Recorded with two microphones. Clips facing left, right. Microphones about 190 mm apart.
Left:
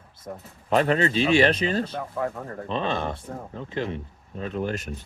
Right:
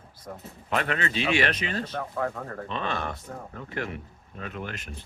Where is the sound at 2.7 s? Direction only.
30° left (ahead or behind).